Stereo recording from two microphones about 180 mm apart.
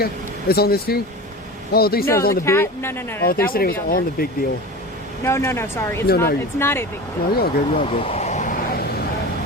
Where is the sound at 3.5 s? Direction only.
55° left (ahead or behind).